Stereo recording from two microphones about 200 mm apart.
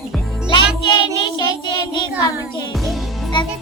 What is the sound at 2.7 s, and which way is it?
Music, centre (ahead or behind).